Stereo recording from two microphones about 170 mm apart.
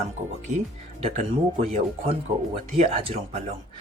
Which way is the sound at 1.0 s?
35° right (ahead or behind).